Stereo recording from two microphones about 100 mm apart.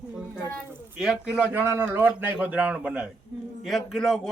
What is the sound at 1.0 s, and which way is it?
A man's voice, 5° right (ahead or behind).